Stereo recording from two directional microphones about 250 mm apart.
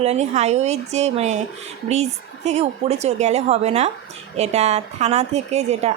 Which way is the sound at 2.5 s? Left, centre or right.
Right.